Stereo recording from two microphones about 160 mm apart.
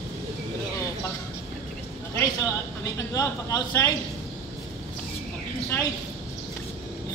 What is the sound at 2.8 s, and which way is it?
A man's voice, 20° left (ahead or behind).